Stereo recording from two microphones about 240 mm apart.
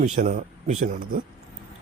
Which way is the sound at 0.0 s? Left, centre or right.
Right.